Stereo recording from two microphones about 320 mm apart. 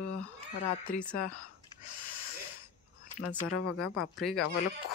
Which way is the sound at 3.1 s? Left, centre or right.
Left.